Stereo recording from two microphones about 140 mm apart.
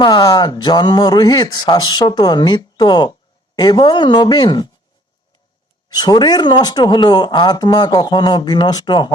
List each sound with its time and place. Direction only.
0.0 s speech: 30° left (ahead or behind)
5.9 s speech: 30° left (ahead or behind)